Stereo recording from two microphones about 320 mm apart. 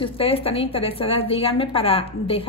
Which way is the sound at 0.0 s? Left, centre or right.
Centre.